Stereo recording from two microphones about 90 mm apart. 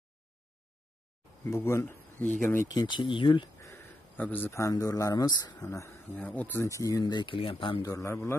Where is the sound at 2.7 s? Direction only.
55° left (ahead or behind).